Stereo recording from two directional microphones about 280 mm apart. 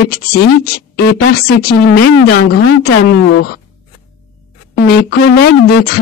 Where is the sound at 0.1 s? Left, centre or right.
Left.